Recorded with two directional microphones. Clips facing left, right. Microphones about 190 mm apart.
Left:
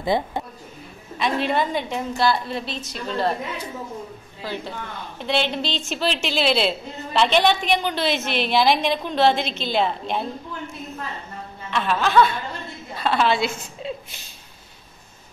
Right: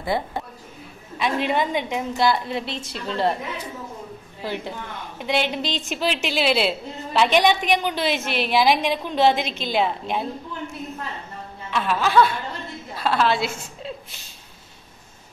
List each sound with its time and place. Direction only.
0.0 s a woman's voice: 20° left (ahead or behind)
1.1 s a woman's voice: 10° right (ahead or behind)
4.4 s a woman's voice: 20° right (ahead or behind)
11.7 s a woman's voice: 5° right (ahead or behind)